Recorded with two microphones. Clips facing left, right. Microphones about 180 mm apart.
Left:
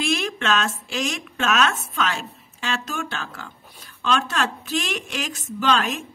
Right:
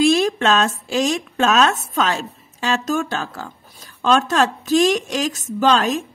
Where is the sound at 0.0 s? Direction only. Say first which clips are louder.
Right 9 dB; 35° right (ahead or behind).